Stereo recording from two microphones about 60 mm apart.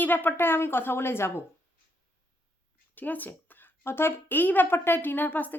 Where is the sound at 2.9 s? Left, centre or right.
Left.